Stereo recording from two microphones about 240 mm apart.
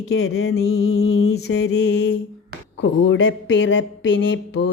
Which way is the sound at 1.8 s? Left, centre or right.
Left.